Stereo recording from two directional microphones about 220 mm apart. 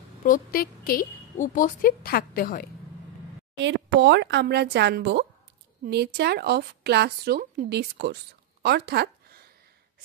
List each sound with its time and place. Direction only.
0.2 s a woman's voice: 40° left (ahead or behind)
3.5 s a woman's voice: 55° right (ahead or behind)